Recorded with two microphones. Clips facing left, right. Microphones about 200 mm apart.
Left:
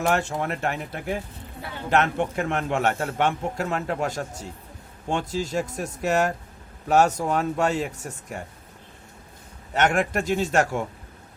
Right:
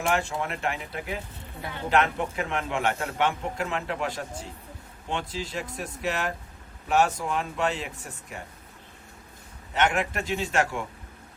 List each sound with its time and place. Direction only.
0.1 s a man's voice: 45° left (ahead or behind)
9.7 s a man's voice: 45° left (ahead or behind)